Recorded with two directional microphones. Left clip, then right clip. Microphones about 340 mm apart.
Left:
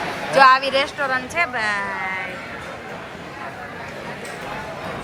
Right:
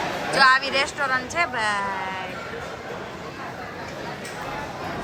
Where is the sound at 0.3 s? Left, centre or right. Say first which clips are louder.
Left 4 dB; centre.